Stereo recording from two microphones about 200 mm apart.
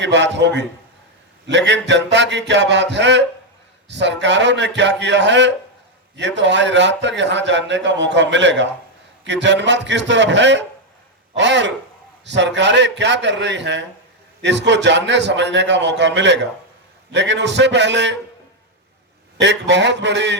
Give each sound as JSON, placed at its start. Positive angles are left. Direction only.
{"t": 0.0, "sound": "a man's voice", "side_deg": -60}
{"t": 19.4, "sound": "a man's voice", "side_deg": -60}